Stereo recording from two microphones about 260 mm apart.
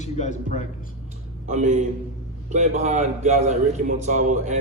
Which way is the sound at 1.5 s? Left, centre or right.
Right.